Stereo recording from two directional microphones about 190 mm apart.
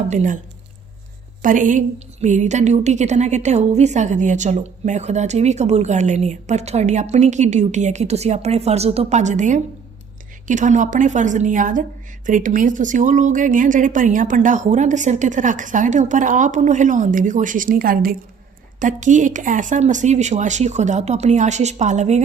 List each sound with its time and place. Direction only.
0.1 s a woman's voice: 40° right (ahead or behind)
1.4 s a woman's voice: 45° right (ahead or behind)